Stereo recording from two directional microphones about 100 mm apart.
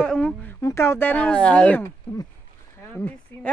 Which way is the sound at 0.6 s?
30° left (ahead or behind).